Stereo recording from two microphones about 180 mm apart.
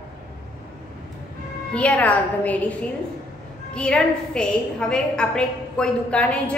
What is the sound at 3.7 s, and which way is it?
A woman's voice, 5° left (ahead or behind).